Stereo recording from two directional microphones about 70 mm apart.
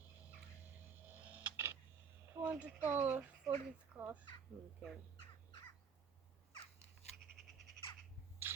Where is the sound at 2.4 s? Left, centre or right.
Right.